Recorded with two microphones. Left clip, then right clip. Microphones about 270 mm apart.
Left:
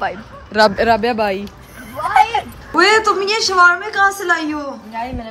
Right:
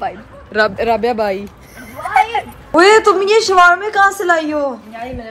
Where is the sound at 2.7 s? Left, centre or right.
Centre.